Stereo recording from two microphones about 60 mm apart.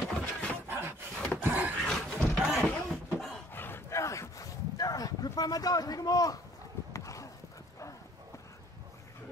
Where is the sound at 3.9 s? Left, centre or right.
Left.